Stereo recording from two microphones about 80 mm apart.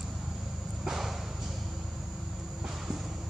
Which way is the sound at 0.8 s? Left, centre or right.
Centre.